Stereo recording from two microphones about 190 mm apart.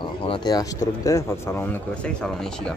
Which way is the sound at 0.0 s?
25° left (ahead or behind).